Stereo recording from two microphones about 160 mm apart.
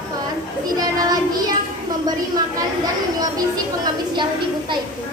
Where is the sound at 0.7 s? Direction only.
25° right (ahead or behind).